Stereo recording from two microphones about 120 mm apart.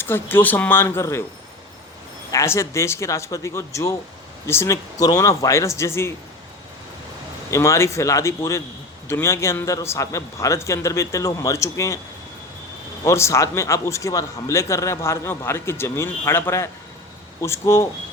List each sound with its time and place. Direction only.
0.0 s a man's voice: 20° left (ahead or behind)
2.3 s a man's voice: 25° left (ahead or behind)
7.5 s a man's voice: 25° left (ahead or behind)
13.1 s a man's voice: 25° left (ahead or behind)